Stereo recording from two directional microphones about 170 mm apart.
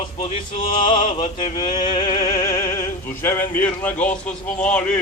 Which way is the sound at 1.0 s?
45° left (ahead or behind).